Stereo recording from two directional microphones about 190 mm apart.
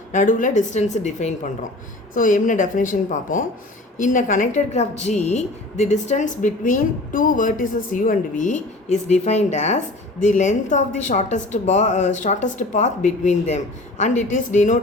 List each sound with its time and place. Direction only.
0.1 s a woman's voice: 40° left (ahead or behind)